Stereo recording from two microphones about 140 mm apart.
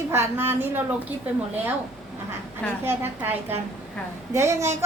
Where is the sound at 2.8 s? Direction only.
15° right (ahead or behind).